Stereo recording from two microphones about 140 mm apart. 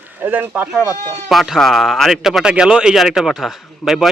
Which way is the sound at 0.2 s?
15° right (ahead or behind).